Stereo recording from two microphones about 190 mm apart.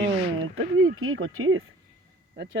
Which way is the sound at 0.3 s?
90° right.